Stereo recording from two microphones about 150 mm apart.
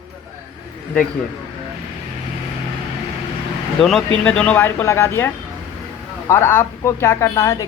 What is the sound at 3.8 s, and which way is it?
Speech, centre (ahead or behind).